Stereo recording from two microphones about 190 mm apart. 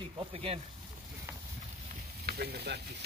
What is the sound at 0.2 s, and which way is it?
Speech, 30° right (ahead or behind).